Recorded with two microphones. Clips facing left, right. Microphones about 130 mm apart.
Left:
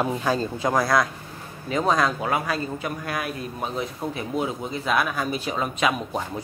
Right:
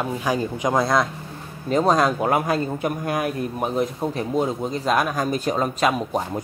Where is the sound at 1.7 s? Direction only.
40° right (ahead or behind).